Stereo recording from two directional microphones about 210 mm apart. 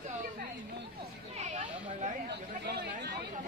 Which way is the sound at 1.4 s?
35° right (ahead or behind).